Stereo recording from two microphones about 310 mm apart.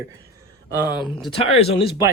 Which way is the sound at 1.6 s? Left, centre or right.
Centre.